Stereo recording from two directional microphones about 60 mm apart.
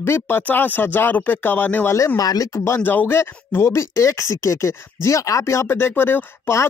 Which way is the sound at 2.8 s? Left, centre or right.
Left.